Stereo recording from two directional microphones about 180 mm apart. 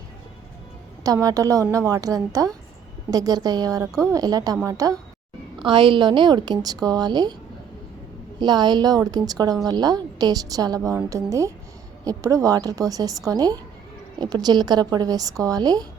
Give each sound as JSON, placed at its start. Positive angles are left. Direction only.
{"t": 1.0, "sound": "a woman's voice", "side_deg": -20}
{"t": 8.4, "sound": "a woman's voice", "side_deg": -25}